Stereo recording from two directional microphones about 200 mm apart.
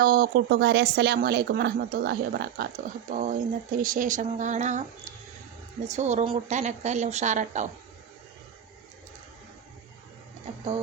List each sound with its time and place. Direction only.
0.0 s speech: 50° right (ahead or behind)
5.9 s a woman's voice: 35° right (ahead or behind)